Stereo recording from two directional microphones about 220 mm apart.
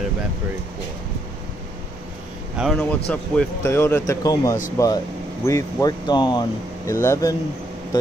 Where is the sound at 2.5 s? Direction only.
Centre (ahead or behind).